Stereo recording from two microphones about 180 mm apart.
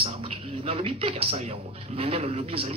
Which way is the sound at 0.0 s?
30° right (ahead or behind).